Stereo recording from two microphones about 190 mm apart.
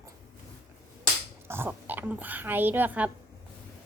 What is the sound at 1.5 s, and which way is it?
Speech, 10° right (ahead or behind).